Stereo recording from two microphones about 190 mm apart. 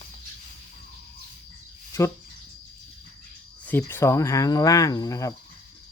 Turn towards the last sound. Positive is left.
turn(degrees=15)  # may be behind; listen again after turning